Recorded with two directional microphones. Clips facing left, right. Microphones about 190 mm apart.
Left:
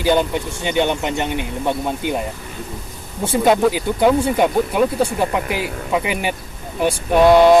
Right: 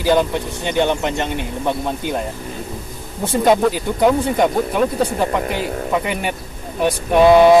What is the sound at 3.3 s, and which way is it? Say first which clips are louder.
Speech: even; 5° left (ahead or behind).